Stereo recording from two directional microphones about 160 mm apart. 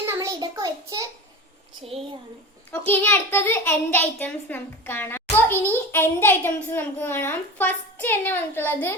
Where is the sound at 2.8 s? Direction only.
15° left (ahead or behind).